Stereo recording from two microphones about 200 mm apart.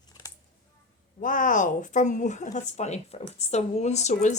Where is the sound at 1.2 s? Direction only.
40° left (ahead or behind).